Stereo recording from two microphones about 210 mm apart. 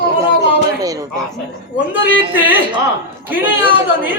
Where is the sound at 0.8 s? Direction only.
15° right (ahead or behind).